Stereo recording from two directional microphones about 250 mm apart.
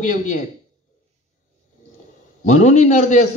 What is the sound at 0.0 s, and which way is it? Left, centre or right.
Speech, left.